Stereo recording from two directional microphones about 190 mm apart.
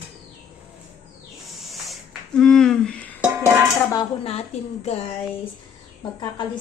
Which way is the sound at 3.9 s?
25° left (ahead or behind).